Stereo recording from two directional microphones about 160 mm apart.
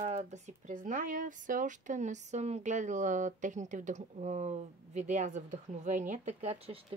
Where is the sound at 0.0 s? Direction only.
45° right (ahead or behind).